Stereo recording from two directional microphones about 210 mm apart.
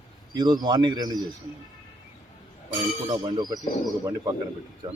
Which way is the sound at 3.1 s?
20° right (ahead or behind).